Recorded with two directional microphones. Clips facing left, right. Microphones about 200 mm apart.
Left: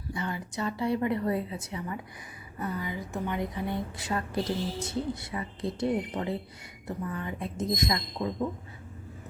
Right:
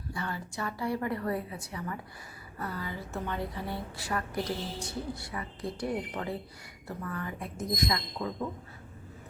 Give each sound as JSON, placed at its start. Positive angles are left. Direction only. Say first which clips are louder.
{"t": 0.1, "sound": "a woman's voice", "louder": "left 3 dB", "side_deg": 20}